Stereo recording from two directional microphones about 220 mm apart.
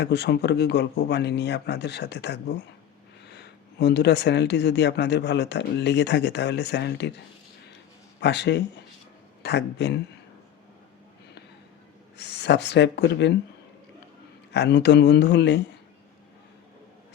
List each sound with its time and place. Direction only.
0.0 s speech: 50° left (ahead or behind)
8.2 s speech: 50° left (ahead or behind)
12.1 s speech: 50° left (ahead or behind)
14.5 s speech: 50° left (ahead or behind)